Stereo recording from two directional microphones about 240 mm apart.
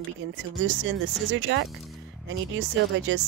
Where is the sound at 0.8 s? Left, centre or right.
Right.